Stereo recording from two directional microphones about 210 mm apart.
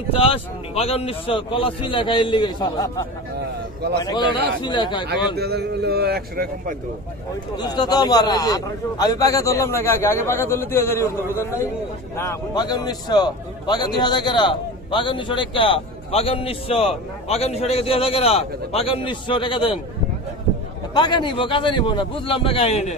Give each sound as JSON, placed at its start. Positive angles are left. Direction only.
{"t": 0.1, "sound": "a man's voice", "side_deg": 25}
{"t": 4.0, "sound": "a man's voice", "side_deg": 20}
{"t": 5.3, "sound": "speech", "side_deg": -50}
{"t": 7.5, "sound": "a man's voice", "side_deg": 20}
{"t": 20.9, "sound": "a man's voice", "side_deg": 20}